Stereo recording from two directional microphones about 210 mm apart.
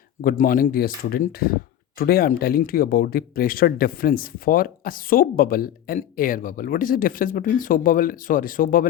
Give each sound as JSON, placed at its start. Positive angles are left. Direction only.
{"t": 0.2, "sound": "speech", "side_deg": 40}